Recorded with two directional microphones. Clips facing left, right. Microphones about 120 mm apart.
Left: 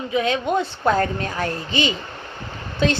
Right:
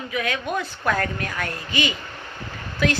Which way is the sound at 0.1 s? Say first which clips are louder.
Left 6 dB; 25° left (ahead or behind).